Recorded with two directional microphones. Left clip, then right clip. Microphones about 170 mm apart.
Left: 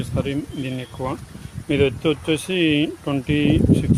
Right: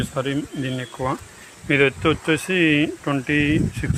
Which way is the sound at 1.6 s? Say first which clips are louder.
Right 1 dB; 20° left (ahead or behind).